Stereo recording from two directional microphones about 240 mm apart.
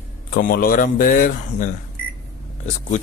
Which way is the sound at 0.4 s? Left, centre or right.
Left.